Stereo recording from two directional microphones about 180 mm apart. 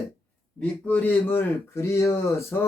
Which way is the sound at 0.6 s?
10° left (ahead or behind).